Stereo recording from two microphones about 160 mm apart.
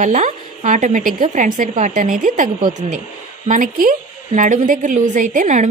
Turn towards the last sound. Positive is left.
turn(degrees=-50)  # may be behind; listen again after turning